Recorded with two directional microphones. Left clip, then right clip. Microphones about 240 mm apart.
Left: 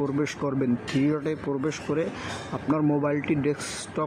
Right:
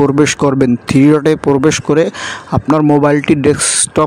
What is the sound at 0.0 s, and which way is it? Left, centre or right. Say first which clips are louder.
Speech: right 17 dB; right.